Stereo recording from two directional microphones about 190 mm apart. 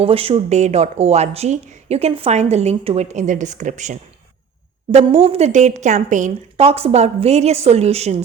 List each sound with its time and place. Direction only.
0.0 s speech: 30° right (ahead or behind)